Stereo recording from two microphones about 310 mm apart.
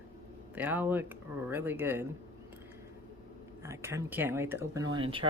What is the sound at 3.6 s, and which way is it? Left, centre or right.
Speech, centre.